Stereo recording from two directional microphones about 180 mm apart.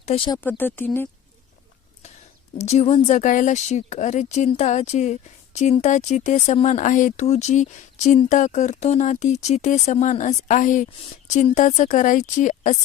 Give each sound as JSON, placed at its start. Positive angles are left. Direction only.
{"t": 0.1, "sound": "speech", "side_deg": 35}
{"t": 0.4, "sound": "speech", "side_deg": 10}
{"t": 2.6, "sound": "a woman's voice", "side_deg": 40}